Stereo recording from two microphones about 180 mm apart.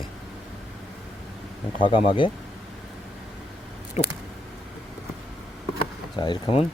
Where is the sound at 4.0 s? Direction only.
40° left (ahead or behind).